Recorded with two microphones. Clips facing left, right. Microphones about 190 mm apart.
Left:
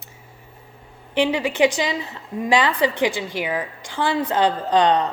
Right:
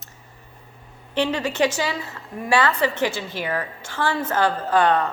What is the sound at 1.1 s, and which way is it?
A woman's voice, 10° left (ahead or behind).